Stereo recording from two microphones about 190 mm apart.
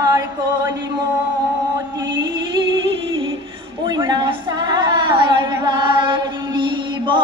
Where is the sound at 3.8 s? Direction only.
20° right (ahead or behind).